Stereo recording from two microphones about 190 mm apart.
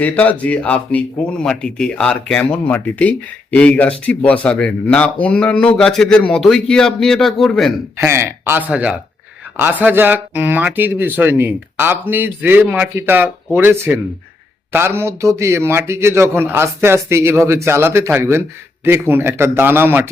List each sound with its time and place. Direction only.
0.0 s speech: 10° left (ahead or behind)
7.9 s speech: 15° right (ahead or behind)